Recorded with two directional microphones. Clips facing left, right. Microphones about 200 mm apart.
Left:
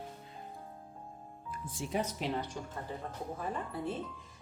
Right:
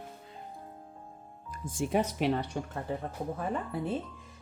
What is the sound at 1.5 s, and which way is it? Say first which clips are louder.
Speech: right 7 dB; 45° right (ahead or behind).